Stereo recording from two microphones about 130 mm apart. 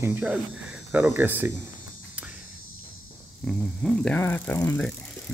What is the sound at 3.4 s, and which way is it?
Speech, 5° left (ahead or behind).